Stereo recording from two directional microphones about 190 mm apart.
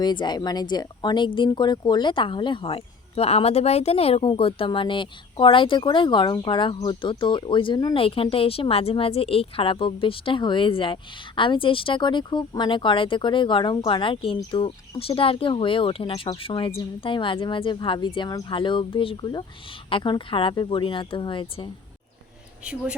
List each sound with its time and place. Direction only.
0.0 s speech: 25° left (ahead or behind)
22.6 s speech: 5° right (ahead or behind)